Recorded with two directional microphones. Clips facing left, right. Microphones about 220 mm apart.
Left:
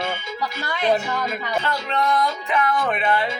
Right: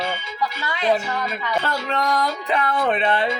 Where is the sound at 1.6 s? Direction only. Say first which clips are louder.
Even; 40° right (ahead or behind).